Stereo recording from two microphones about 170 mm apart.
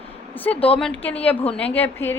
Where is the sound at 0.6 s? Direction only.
35° left (ahead or behind).